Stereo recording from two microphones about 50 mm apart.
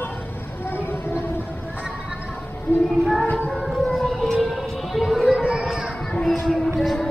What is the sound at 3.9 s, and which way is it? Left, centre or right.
Civil defense siren, centre.